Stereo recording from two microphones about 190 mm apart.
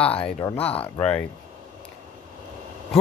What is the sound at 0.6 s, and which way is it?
Speech, 30° left (ahead or behind).